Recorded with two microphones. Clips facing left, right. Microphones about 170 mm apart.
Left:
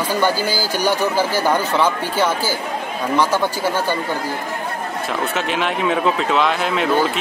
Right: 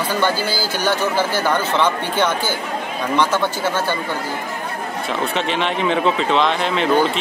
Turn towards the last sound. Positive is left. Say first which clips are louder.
# right 1 dB
turn(degrees=5)  # may be behind; listen again after turning